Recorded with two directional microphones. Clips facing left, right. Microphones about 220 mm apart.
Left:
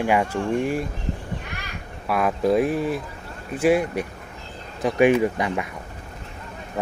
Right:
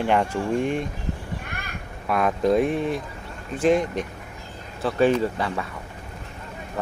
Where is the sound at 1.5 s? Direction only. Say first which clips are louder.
Even; 55° right (ahead or behind).